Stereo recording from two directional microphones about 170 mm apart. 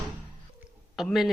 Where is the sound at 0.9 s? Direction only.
Centre (ahead or behind).